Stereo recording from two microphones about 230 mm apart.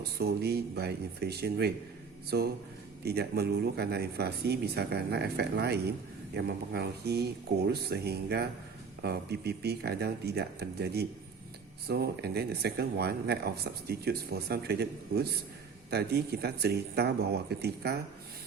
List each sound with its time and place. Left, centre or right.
0.2 s speech: right